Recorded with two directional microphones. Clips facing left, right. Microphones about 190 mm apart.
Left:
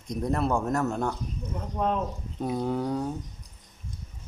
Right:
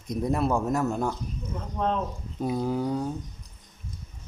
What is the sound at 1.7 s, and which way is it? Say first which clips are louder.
Speech: even; 10° left (ahead or behind).